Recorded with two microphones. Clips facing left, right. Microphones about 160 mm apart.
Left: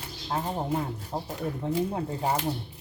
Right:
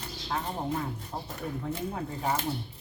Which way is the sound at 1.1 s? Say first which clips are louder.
Left 6 dB; 25° left (ahead or behind).